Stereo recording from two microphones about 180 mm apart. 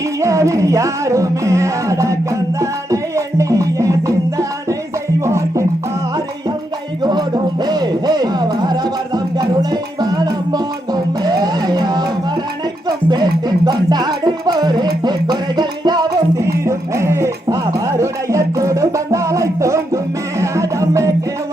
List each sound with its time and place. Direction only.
0.2 s music: 15° right (ahead or behind)
7.0 s music: 25° right (ahead or behind)
13.1 s music: 25° right (ahead or behind)